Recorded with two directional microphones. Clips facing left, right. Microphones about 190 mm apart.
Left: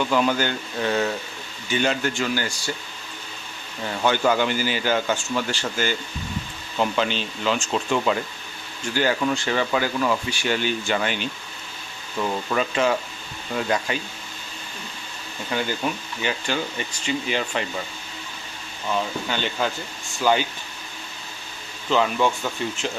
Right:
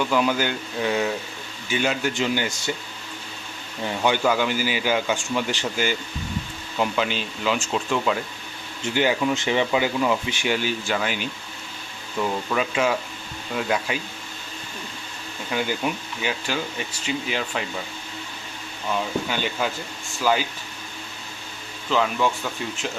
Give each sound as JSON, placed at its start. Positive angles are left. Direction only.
{"t": 0.0, "sound": "speech", "side_deg": -5}
{"t": 2.1, "sound": "speech", "side_deg": -20}
{"t": 3.8, "sound": "speech", "side_deg": -15}
{"t": 8.8, "sound": "speech", "side_deg": -20}
{"t": 15.5, "sound": "speech", "side_deg": -10}
{"t": 19.3, "sound": "speech", "side_deg": -10}
{"t": 21.8, "sound": "speech", "side_deg": 0}